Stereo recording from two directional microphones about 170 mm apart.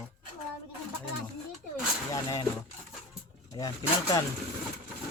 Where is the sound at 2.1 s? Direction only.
20° left (ahead or behind).